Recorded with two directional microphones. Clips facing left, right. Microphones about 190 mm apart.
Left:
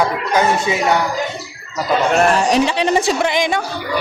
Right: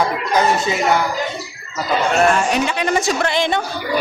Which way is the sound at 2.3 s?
35° left (ahead or behind).